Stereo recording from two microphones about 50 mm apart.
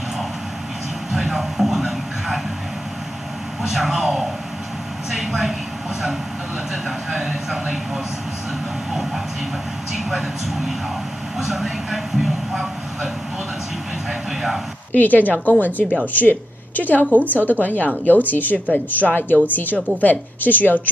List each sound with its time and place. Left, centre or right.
1.1 s speech: centre
3.6 s speech: centre
7.1 s speech: centre
9.9 s speech: centre
11.3 s vehicle: centre
14.9 s a woman's voice: left